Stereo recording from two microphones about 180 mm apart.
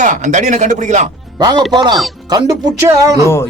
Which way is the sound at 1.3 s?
20° right (ahead or behind).